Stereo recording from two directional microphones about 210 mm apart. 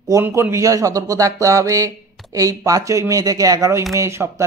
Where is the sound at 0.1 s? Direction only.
15° right (ahead or behind).